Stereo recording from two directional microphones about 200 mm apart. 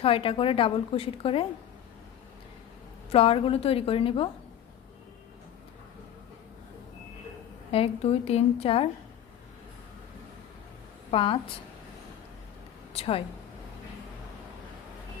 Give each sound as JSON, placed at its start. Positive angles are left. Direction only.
{"t": 0.0, "sound": "a woman's voice", "side_deg": 30}
{"t": 3.1, "sound": "a woman's voice", "side_deg": 30}
{"t": 7.7, "sound": "a woman's voice", "side_deg": 30}
{"t": 11.1, "sound": "a woman's voice", "side_deg": 25}
{"t": 12.9, "sound": "speech", "side_deg": 30}